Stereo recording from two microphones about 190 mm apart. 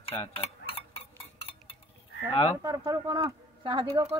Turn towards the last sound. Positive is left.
turn(degrees=-20)  # may be behind; listen again after turning